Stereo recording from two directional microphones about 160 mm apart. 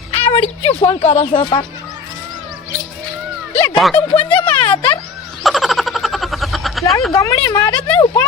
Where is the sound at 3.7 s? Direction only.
5° left (ahead or behind).